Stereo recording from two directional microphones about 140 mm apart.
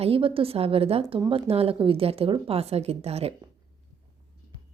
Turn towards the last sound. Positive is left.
turn(degrees=-45)  # may be behind; listen again after turning